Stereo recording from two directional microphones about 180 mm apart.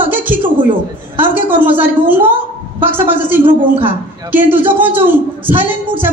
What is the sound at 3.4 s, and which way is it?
Speech, 30° right (ahead or behind).